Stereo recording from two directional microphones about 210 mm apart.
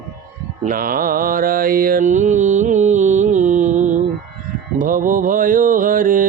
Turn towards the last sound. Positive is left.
turn(degrees=-40)  # may be behind; listen again after turning